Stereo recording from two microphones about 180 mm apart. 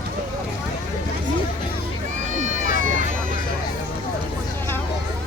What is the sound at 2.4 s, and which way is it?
Run, 45° right (ahead or behind).